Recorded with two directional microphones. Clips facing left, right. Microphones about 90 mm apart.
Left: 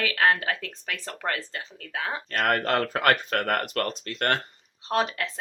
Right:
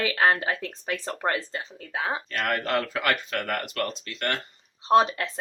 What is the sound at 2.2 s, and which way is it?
Speech, 50° left (ahead or behind).